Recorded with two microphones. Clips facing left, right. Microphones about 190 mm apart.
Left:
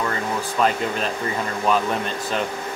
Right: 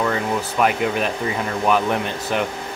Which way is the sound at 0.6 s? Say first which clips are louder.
Right 2 dB; 15° right (ahead or behind).